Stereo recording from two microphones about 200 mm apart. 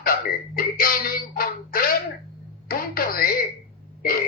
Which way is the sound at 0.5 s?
45° left (ahead or behind).